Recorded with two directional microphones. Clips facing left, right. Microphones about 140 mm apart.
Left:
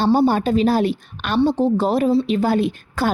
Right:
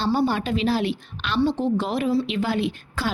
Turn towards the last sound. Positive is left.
turn(degrees=45)  # may be behind; listen again after turning